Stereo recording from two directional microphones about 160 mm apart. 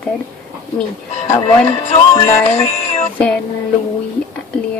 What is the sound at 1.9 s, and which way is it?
Music, 45° left (ahead or behind).